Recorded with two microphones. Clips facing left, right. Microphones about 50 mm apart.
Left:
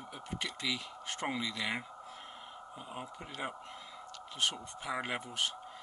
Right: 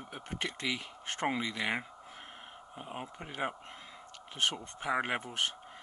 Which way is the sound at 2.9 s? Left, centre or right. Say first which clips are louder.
Right 4 dB; right.